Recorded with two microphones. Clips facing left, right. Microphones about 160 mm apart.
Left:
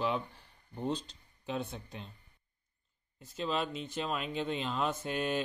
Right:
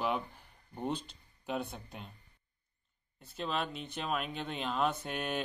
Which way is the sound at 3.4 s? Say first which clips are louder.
Left 2 dB; centre (ahead or behind).